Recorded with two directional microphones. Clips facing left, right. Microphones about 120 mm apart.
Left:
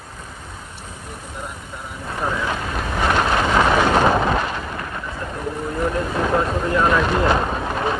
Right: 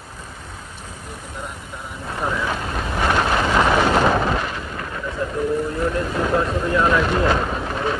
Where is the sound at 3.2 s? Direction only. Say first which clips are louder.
Left 1 dB; 10° left (ahead or behind).